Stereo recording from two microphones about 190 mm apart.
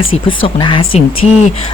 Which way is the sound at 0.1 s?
25° left (ahead or behind).